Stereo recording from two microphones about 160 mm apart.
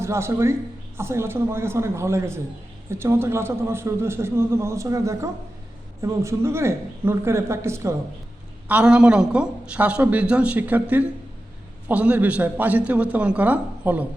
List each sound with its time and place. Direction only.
0.0 s a man's voice: 15° right (ahead or behind)